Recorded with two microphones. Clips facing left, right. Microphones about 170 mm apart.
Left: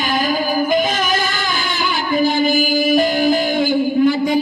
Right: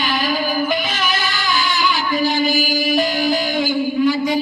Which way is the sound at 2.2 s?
50° left (ahead or behind).